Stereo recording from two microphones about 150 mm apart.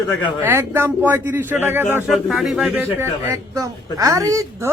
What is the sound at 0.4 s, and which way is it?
Speech, 15° right (ahead or behind).